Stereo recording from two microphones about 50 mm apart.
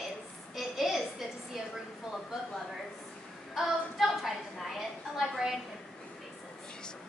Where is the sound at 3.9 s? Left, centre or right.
Centre.